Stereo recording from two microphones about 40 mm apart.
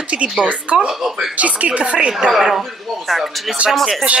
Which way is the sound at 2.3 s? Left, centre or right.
Centre.